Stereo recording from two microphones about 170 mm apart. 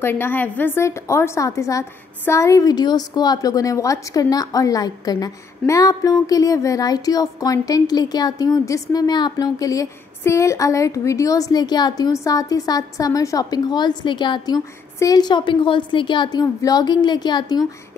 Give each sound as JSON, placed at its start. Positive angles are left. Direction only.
{"t": 0.0, "sound": "a woman's voice", "side_deg": 15}